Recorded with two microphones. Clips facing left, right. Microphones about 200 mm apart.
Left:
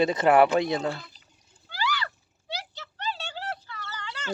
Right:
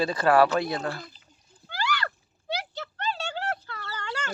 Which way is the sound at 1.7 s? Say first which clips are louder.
Right 1 dB; 50° right (ahead or behind).